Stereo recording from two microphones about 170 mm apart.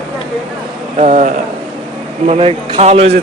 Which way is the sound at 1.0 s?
40° right (ahead or behind).